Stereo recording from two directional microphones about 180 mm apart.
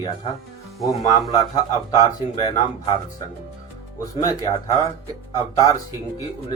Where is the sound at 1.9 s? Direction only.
20° left (ahead or behind).